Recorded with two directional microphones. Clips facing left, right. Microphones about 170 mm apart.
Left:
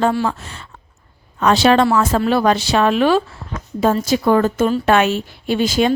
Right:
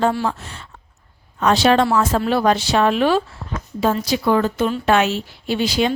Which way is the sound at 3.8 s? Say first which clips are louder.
Left 3 dB; 45° left (ahead or behind).